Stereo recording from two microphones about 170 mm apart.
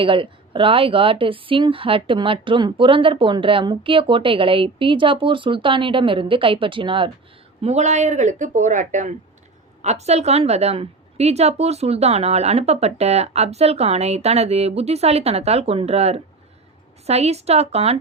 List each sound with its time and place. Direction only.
0.0 s speech: 30° right (ahead or behind)
7.6 s speech: 40° right (ahead or behind)